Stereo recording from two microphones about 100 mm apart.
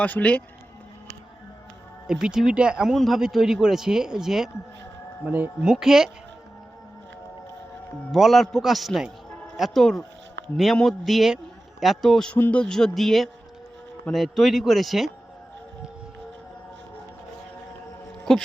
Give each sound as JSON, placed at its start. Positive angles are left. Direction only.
{"t": 0.0, "sound": "a man's voice", "side_deg": 15}
{"t": 2.0, "sound": "speech", "side_deg": -5}
{"t": 5.2, "sound": "speech", "side_deg": -15}
{"t": 5.6, "sound": "speech", "side_deg": -5}
{"t": 8.1, "sound": "speech", "side_deg": 0}
{"t": 18.3, "sound": "speech", "side_deg": 5}